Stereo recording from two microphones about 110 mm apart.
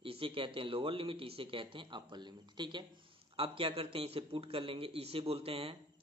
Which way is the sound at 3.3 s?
55° right (ahead or behind).